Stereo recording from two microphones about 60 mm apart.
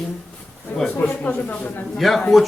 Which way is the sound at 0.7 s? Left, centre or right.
Left.